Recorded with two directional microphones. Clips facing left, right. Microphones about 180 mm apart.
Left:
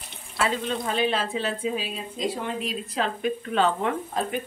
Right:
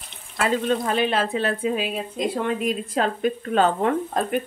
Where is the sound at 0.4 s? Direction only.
55° right (ahead or behind).